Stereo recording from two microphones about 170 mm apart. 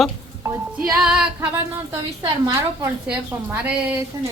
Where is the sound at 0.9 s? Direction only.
5° right (ahead or behind).